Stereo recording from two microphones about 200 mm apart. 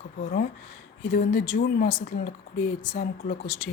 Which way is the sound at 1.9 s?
35° left (ahead or behind).